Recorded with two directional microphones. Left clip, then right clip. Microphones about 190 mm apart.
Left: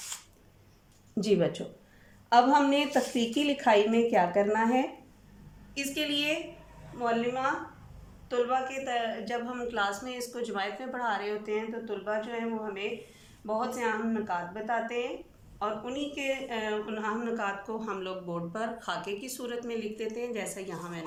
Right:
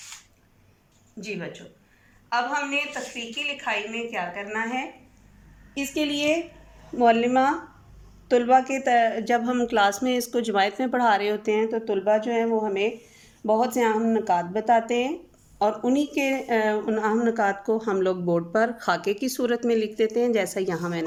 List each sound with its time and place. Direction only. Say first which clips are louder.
2.3 s a woman's voice: left 2 dB; 35° left (ahead or behind)
5.7 s a woman's voice: right 4 dB; 25° right (ahead or behind)
7.0 s speech: right 10 dB; 45° right (ahead or behind)